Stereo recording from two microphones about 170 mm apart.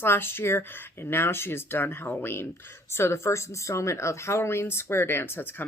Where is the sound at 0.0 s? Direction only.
15° left (ahead or behind).